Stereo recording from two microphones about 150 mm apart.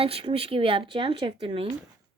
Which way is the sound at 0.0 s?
40° right (ahead or behind).